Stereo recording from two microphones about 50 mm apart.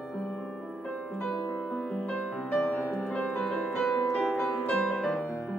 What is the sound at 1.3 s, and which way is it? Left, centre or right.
Music, left.